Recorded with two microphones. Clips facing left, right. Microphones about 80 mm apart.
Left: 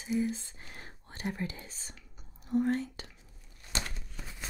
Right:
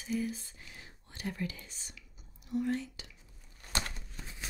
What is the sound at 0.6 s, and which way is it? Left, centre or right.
Speech, left.